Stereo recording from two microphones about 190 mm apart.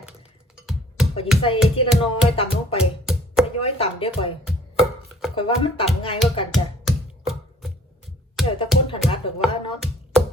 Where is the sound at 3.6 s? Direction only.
30° left (ahead or behind).